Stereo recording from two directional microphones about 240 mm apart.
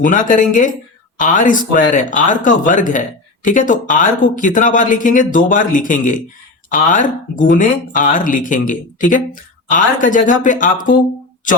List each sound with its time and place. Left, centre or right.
0.0 s speech: left